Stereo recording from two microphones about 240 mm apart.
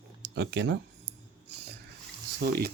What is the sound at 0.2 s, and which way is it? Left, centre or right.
Speech, right.